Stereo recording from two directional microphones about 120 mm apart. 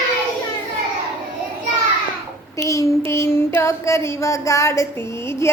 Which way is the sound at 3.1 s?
20° left (ahead or behind).